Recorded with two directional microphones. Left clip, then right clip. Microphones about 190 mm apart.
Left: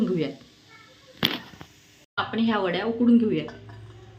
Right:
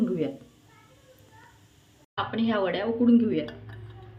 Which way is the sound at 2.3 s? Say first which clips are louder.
Left 1 dB; 30° left (ahead or behind).